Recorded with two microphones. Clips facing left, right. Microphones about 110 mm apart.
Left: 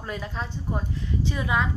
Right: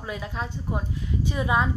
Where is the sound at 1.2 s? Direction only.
20° right (ahead or behind).